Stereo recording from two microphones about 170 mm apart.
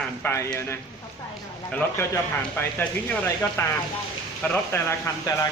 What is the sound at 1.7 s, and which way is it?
A man's voice, 10° left (ahead or behind).